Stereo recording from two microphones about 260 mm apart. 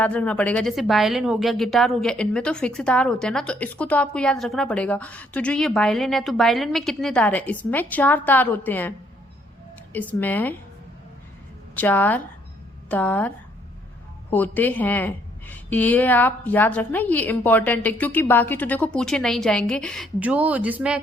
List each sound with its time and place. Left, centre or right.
0.0 s a woman's voice: centre
9.9 s a woman's voice: centre
11.7 s a woman's voice: centre